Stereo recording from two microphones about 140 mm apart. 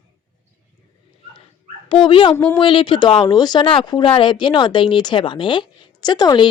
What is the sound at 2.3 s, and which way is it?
Speech, 15° left (ahead or behind).